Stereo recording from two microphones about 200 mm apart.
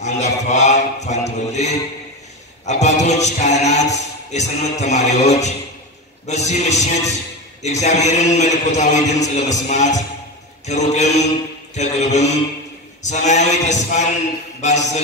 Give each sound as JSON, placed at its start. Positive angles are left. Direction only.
{"t": 0.0, "sound": "music", "side_deg": 35}